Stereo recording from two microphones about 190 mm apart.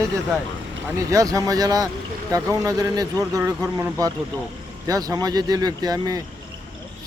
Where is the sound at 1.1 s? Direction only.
20° right (ahead or behind).